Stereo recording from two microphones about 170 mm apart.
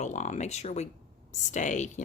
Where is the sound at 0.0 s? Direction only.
45° left (ahead or behind).